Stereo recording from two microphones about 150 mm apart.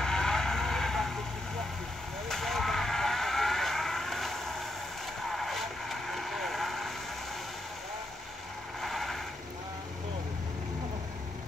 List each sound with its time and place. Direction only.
0.0 s vehicle: 5° left (ahead or behind)
2.2 s vehicle: centre (ahead or behind)
8.8 s vehicle: centre (ahead or behind)